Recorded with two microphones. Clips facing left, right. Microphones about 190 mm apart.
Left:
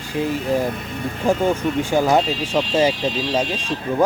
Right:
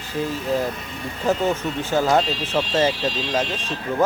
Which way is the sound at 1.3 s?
15° left (ahead or behind).